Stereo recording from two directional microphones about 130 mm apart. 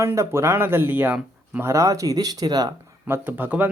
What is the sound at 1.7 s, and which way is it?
Speech, 25° right (ahead or behind).